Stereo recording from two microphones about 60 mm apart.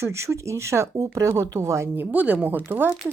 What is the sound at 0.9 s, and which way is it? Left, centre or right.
Speech, right.